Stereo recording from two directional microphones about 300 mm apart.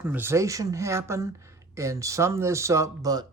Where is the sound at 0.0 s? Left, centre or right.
Centre.